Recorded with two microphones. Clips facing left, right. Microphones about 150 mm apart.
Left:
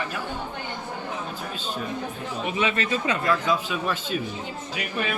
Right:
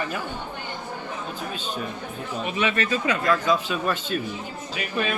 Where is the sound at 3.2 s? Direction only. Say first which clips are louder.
Right 2 dB; 10° left (ahead or behind).